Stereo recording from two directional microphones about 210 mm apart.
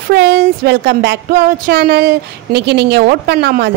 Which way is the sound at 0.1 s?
50° right (ahead or behind).